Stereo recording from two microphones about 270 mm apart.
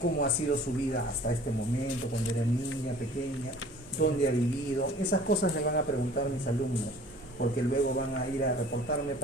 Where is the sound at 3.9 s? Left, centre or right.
Left.